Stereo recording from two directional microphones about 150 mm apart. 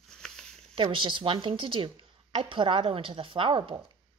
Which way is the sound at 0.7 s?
35° right (ahead or behind).